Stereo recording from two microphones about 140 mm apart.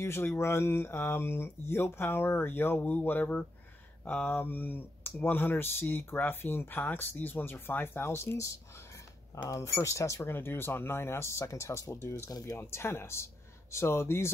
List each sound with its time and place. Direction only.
0.0 s speech: 15° left (ahead or behind)